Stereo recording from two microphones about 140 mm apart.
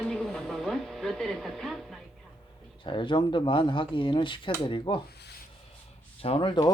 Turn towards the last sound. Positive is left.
turn(degrees=35)  # may be behind; listen again after turning